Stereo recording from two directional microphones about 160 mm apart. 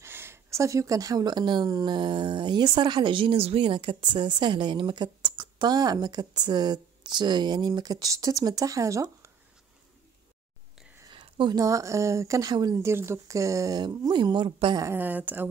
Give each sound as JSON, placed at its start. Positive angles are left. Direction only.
{"t": 0.0, "sound": "speech", "side_deg": -15}
{"t": 11.0, "sound": "speech", "side_deg": -30}